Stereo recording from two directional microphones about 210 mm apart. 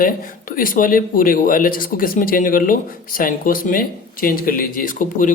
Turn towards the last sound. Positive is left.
turn(degrees=40)  # may be behind; listen again after turning